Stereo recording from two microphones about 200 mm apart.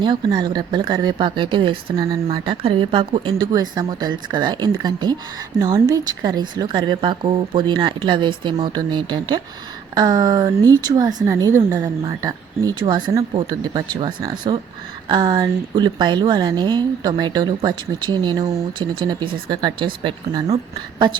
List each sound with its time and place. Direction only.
0.0 s speech: 20° right (ahead or behind)